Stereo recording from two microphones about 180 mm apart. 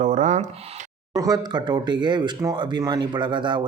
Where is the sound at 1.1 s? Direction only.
20° right (ahead or behind).